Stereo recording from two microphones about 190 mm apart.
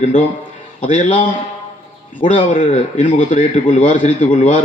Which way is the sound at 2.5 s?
40° left (ahead or behind).